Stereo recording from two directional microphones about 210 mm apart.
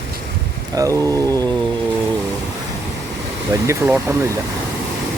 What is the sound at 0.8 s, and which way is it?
Speech, 15° right (ahead or behind).